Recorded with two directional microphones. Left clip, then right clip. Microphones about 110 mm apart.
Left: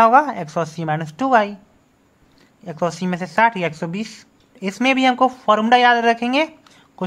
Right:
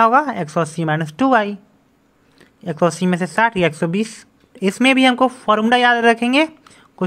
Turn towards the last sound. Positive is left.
turn(degrees=-25)  # may be behind; listen again after turning